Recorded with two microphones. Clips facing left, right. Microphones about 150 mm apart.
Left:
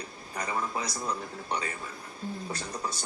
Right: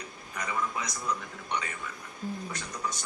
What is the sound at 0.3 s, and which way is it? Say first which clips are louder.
A man's voice: left 1 dB; 35° left (ahead or behind).